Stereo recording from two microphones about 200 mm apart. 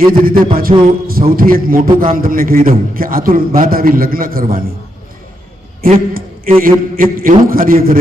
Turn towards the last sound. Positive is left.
turn(degrees=-45)  # may be behind; listen again after turning